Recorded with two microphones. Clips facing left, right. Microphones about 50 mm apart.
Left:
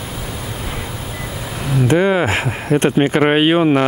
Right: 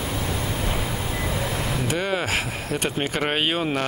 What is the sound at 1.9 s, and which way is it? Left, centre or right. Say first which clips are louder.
Speech: left 12 dB; left.